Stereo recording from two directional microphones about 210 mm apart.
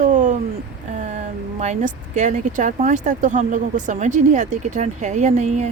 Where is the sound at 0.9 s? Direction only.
35° right (ahead or behind).